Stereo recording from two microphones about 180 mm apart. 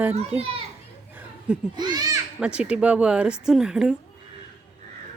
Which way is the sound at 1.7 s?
20° right (ahead or behind).